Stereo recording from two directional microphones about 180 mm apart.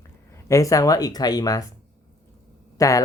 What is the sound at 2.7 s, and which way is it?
Speech, 20° left (ahead or behind).